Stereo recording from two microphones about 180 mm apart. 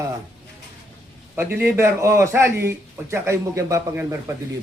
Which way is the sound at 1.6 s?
15° right (ahead or behind).